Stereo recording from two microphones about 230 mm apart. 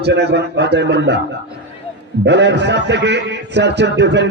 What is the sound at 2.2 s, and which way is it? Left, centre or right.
A man's voice, right.